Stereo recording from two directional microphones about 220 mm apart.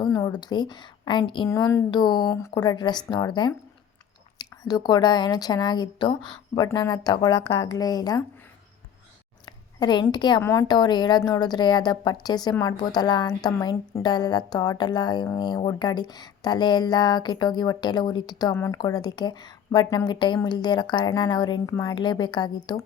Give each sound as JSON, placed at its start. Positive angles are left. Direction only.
{"t": 0.0, "sound": "a woman's voice", "side_deg": 15}
{"t": 9.5, "sound": "a woman's voice", "side_deg": 20}